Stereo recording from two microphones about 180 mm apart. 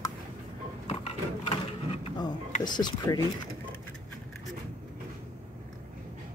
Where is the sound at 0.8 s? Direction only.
35° left (ahead or behind).